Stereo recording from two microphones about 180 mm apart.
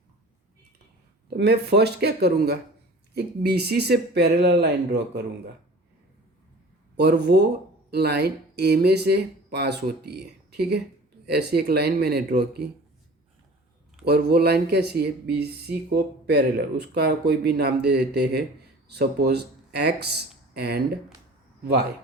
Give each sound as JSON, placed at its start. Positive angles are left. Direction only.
{"t": 1.4, "sound": "speech", "side_deg": -65}
{"t": 6.9, "sound": "speech", "side_deg": -65}
{"t": 14.0, "sound": "speech", "side_deg": -60}